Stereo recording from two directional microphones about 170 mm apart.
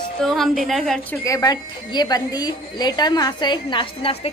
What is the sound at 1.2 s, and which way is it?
A woman's voice, 20° left (ahead or behind).